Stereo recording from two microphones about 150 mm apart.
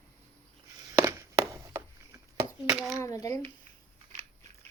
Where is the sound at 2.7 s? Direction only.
Centre (ahead or behind).